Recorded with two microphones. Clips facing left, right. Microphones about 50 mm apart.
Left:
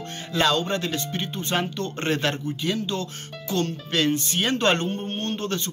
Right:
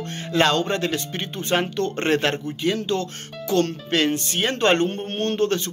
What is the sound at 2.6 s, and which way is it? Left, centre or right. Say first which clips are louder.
Speech: right 5 dB; right.